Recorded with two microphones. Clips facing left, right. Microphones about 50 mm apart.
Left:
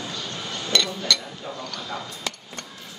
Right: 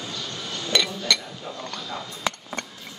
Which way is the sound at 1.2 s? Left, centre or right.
Left.